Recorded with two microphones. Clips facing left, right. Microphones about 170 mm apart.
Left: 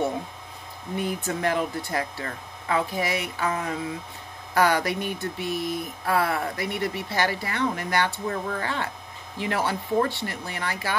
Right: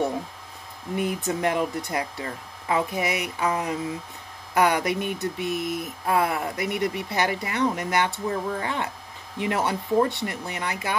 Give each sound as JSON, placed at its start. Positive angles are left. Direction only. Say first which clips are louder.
{"t": 0.9, "sound": "speech", "louder": "right 2 dB", "side_deg": -20}